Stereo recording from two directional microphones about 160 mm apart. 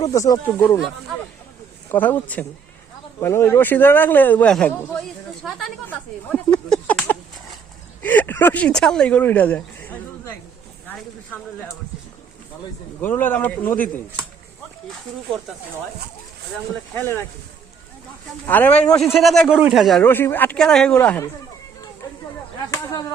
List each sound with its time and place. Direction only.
0.0 s speech: 25° left (ahead or behind)
0.3 s speech: 10° left (ahead or behind)
1.9 s speech: 10° left (ahead or behind)
10.8 s a sound: 10° left (ahead or behind)
13.0 s speech: 10° left (ahead or behind)
16.9 s speech: 15° left (ahead or behind)
18.4 s a man's voice: 10° left (ahead or behind)
20.0 s speech: 15° left (ahead or behind)
22.0 s a sound: 20° left (ahead or behind)
22.7 s speech: 15° left (ahead or behind)